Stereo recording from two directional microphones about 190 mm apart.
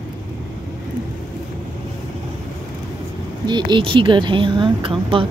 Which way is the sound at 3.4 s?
25° right (ahead or behind).